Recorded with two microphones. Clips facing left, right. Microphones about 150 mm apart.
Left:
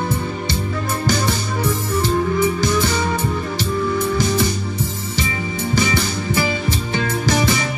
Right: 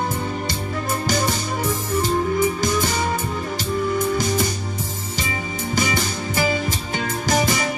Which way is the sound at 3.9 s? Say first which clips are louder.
Left 2 dB; 45° right (ahead or behind).